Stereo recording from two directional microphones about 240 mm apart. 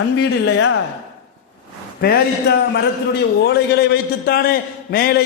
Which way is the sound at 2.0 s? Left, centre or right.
Left.